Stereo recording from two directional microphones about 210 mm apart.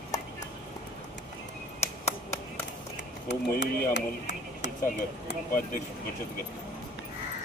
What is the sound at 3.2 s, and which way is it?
Speech, 55° left (ahead or behind).